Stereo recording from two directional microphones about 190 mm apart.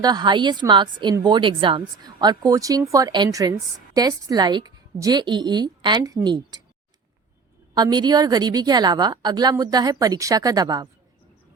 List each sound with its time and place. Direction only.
0.0 s speech: 20° right (ahead or behind)
7.8 s speech: 20° right (ahead or behind)